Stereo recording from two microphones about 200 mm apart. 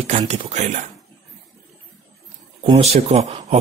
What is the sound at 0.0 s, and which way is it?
Speech, 35° right (ahead or behind).